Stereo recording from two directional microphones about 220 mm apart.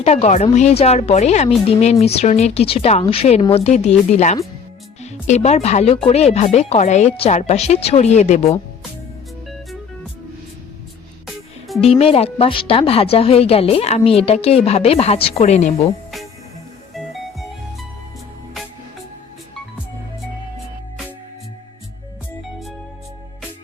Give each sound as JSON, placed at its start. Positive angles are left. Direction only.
{"t": 0.0, "sound": "a woman's voice", "side_deg": 30}
{"t": 11.8, "sound": "a woman's voice", "side_deg": 25}